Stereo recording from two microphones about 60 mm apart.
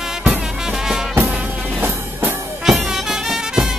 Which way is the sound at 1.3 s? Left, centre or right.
Right.